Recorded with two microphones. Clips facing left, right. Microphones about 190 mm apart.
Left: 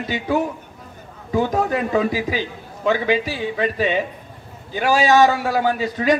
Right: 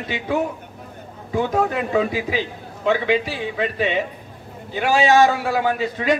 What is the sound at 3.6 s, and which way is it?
A man's voice, 45° left (ahead or behind).